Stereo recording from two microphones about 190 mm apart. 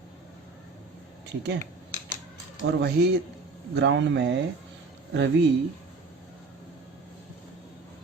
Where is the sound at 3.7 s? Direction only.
70° right (ahead or behind).